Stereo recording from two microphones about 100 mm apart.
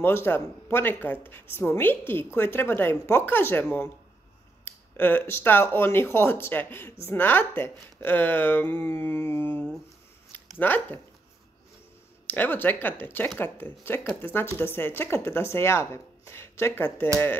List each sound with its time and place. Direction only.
0.0 s speech: 20° left (ahead or behind)
12.3 s speech: 20° left (ahead or behind)